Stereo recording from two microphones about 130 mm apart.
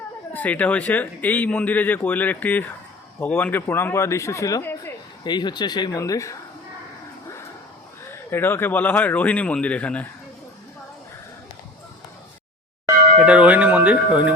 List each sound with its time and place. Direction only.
0.3 s speech: 10° left (ahead or behind)
5.2 s speech: 35° left (ahead or behind)
8.3 s speech: 15° left (ahead or behind)
13.1 s speech: 10° right (ahead or behind)